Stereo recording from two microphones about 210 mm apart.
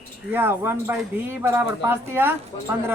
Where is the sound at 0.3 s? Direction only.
10° right (ahead or behind).